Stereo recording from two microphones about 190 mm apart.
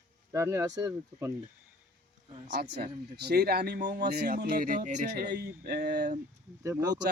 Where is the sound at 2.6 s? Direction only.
60° right (ahead or behind).